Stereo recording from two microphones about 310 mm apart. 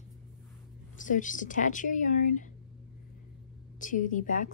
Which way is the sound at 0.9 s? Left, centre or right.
Left.